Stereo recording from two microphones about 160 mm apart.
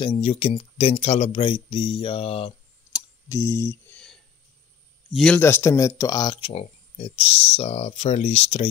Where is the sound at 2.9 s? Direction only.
20° left (ahead or behind).